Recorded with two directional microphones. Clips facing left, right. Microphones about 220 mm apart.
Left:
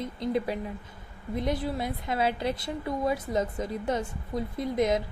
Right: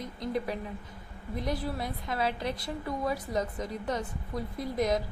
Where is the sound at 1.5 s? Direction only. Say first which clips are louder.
Left 3 dB; 25° left (ahead or behind).